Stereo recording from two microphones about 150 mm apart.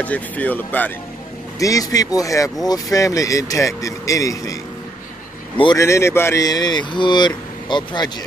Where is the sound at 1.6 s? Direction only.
25° left (ahead or behind).